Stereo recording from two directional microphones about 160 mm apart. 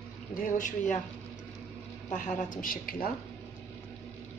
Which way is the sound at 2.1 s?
55° left (ahead or behind).